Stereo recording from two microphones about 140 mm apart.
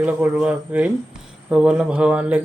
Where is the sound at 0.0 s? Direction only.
10° right (ahead or behind).